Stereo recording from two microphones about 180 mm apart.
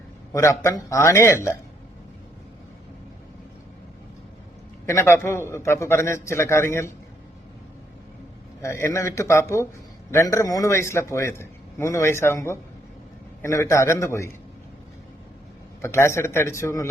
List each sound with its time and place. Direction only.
0.3 s a man's voice: 15° left (ahead or behind)
4.9 s a man's voice: 15° left (ahead or behind)
8.6 s a man's voice: 15° left (ahead or behind)
15.8 s a man's voice: 15° left (ahead or behind)